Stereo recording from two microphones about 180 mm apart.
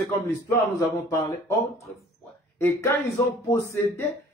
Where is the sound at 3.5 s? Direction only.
15° left (ahead or behind).